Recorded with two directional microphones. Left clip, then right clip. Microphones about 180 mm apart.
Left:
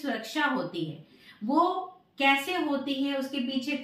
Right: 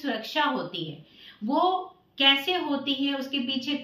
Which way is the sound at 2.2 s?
Centre (ahead or behind).